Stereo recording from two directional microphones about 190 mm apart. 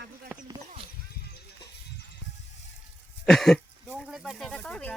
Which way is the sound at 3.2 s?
Centre (ahead or behind).